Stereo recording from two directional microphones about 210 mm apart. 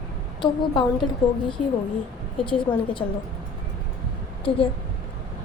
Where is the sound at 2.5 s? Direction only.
25° left (ahead or behind).